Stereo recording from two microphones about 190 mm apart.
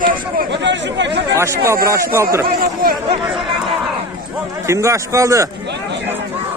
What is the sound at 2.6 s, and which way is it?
Speech, 50° right (ahead or behind).